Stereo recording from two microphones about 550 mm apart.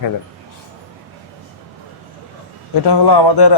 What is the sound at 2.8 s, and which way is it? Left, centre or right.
Speech, left.